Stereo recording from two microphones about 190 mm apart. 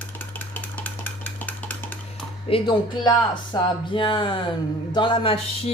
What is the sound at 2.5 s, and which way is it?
Speech, 25° left (ahead or behind).